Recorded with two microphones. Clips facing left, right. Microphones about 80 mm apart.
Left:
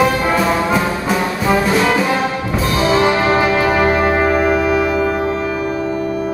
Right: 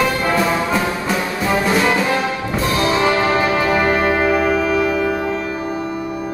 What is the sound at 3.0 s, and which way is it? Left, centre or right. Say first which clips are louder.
Music: left 2 dB; centre.